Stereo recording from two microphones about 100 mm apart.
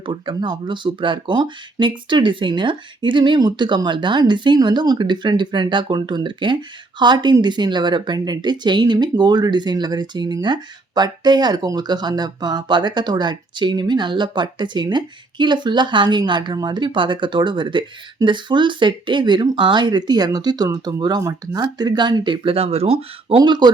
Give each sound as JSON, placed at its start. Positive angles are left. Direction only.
{"t": 0.0, "sound": "speech", "side_deg": -55}
{"t": 22.5, "sound": "speech", "side_deg": -85}
{"t": 23.4, "sound": "speech", "side_deg": -45}